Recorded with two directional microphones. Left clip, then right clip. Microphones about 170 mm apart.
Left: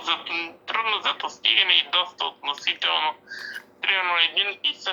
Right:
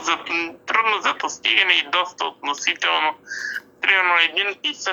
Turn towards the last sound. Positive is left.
turn(degrees=-25)  # may be behind; listen again after turning